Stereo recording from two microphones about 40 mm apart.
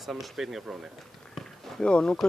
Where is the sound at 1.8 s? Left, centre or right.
Left.